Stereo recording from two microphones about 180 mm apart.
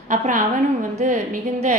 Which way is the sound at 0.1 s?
45° right (ahead or behind).